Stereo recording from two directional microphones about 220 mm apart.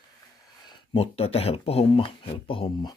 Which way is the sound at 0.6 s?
25° left (ahead or behind).